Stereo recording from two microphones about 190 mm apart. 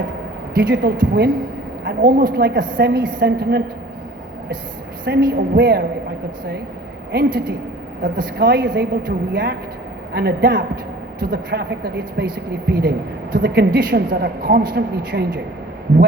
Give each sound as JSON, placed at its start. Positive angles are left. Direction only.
{"t": 0.5, "sound": "a woman's voice", "side_deg": -50}
{"t": 5.0, "sound": "speech", "side_deg": -60}
{"t": 7.1, "sound": "a woman's voice", "side_deg": -50}
{"t": 8.6, "sound": "a woman's voice", "side_deg": -75}
{"t": 9.0, "sound": "a woman's voice", "side_deg": -50}